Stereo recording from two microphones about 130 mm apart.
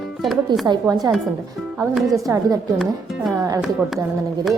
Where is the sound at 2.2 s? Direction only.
25° right (ahead or behind).